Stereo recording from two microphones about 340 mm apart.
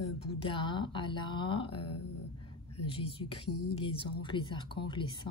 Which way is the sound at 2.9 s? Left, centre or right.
Centre.